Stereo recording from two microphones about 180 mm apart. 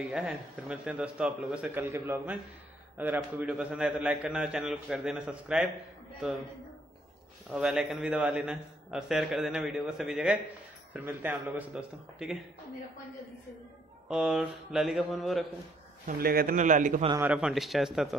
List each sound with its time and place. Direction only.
0.1 s a man's voice: 5° right (ahead or behind)
7.5 s a man's voice: centre (ahead or behind)
14.0 s a man's voice: 5° right (ahead or behind)
16.1 s a man's voice: 55° right (ahead or behind)
17.2 s a man's voice: 5° right (ahead or behind)